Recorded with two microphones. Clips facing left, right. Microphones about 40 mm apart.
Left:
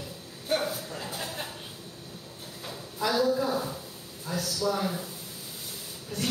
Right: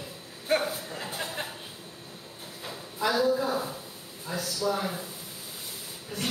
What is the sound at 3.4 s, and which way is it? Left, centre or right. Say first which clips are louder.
Speech: even; centre.